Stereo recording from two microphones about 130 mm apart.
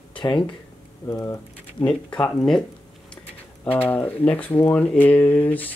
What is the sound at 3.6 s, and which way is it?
Speech, 10° left (ahead or behind).